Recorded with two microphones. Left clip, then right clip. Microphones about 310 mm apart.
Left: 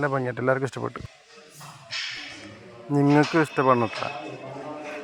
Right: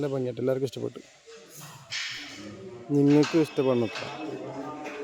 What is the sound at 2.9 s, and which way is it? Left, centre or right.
Speech, centre.